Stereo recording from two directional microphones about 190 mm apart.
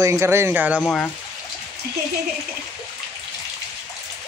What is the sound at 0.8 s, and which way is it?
Speech, 5° left (ahead or behind).